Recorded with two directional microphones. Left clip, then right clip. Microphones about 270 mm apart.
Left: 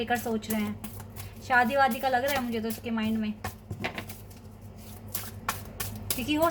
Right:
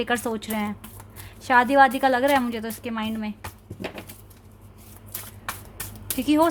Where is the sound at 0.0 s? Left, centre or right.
Right.